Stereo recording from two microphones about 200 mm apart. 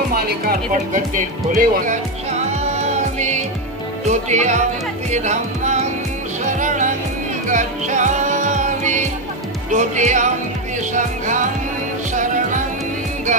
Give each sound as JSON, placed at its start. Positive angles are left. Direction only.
{"t": 0.1, "sound": "speech", "side_deg": -50}
{"t": 2.7, "sound": "music", "side_deg": -35}
{"t": 4.1, "sound": "speech", "side_deg": -35}
{"t": 5.1, "sound": "music", "side_deg": -35}
{"t": 9.7, "sound": "speech", "side_deg": -40}
{"t": 11.0, "sound": "music", "side_deg": -40}